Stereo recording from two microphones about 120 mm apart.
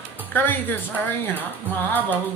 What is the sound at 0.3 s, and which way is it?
Speech, 15° left (ahead or behind).